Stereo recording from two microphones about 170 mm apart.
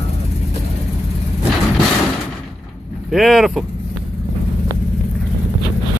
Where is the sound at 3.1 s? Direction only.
Centre (ahead or behind).